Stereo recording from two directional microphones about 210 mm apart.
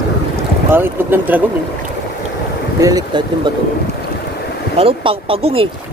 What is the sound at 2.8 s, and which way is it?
Speech, 15° right (ahead or behind).